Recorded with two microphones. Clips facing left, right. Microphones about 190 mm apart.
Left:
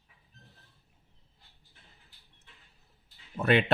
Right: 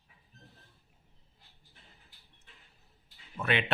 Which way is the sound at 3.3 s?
40° left (ahead or behind).